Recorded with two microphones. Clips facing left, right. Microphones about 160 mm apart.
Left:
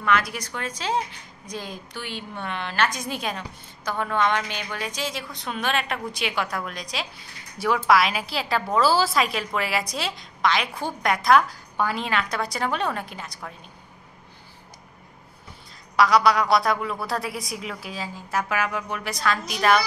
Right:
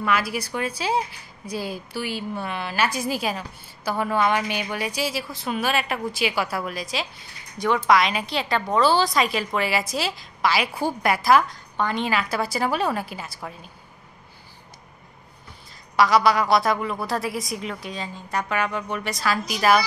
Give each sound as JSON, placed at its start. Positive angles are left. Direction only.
{"t": 0.0, "sound": "a woman's voice", "side_deg": -5}
{"t": 16.0, "sound": "a woman's voice", "side_deg": 0}